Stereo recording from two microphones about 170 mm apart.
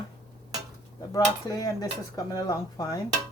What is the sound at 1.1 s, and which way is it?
Speech, 20° left (ahead or behind).